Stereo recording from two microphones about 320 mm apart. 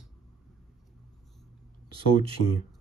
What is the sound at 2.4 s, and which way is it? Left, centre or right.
Speech, left.